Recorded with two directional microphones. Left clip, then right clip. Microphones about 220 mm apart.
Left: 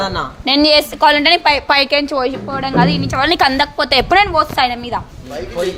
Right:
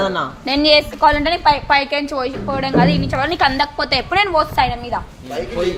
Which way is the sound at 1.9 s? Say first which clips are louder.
Left 5 dB; 30° left (ahead or behind).